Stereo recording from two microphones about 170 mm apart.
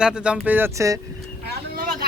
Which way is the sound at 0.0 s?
5° right (ahead or behind).